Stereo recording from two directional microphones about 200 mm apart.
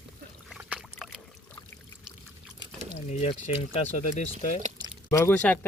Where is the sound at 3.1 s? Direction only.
35° left (ahead or behind).